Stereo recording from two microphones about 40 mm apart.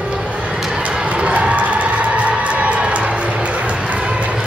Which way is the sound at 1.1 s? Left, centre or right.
Right.